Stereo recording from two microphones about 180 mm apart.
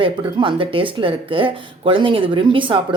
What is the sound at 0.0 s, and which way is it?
Speech, 30° right (ahead or behind).